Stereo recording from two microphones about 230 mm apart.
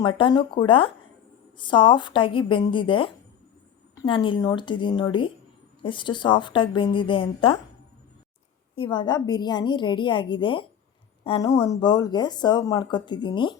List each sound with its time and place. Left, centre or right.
0.2 s speech: left
8.7 s speech: left